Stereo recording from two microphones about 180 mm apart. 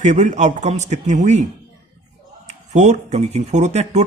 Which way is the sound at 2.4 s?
40° right (ahead or behind).